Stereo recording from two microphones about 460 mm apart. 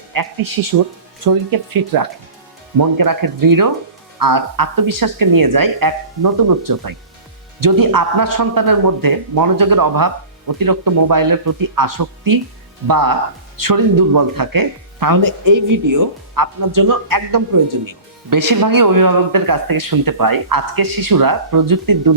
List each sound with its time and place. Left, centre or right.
0.1 s speech: right